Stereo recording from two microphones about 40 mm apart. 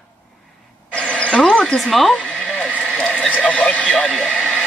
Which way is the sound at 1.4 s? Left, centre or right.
Centre.